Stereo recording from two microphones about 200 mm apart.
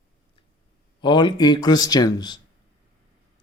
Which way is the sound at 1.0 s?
25° left (ahead or behind).